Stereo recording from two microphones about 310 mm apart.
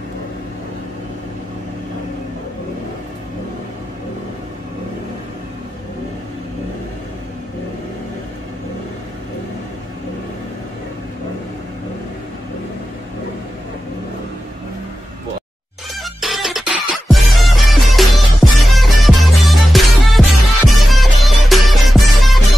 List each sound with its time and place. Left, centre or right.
16.0 s music: centre